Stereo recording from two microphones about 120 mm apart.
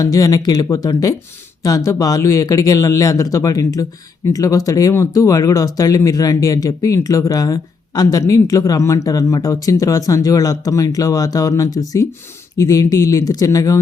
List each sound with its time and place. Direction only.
0.0 s speech: 30° left (ahead or behind)